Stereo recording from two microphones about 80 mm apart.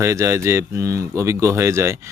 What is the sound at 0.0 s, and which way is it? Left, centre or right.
Speech, right.